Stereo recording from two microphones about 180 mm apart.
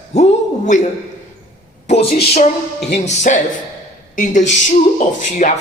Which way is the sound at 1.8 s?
35° left (ahead or behind).